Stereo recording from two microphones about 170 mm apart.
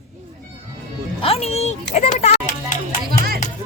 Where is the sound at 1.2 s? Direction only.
35° left (ahead or behind).